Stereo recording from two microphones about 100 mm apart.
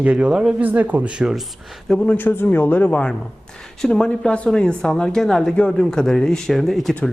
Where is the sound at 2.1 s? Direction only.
20° left (ahead or behind).